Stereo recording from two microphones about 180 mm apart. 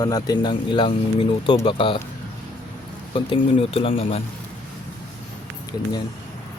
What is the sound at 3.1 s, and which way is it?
Speech, 30° left (ahead or behind).